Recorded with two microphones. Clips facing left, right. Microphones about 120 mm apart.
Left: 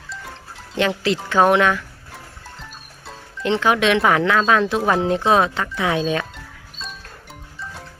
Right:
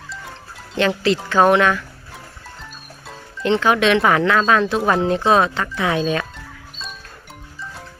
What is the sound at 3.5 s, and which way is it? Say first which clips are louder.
Speech: right 1 dB; 15° left (ahead or behind).